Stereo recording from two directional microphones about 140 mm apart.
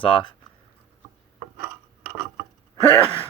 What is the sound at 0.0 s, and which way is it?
Speech, 40° left (ahead or behind).